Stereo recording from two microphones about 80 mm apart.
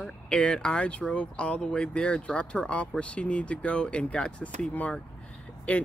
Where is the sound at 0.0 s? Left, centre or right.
Centre.